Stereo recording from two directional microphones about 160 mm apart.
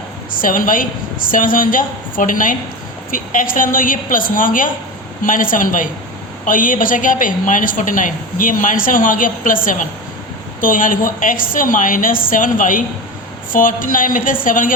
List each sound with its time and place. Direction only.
0.3 s a woman's voice: 60° left (ahead or behind)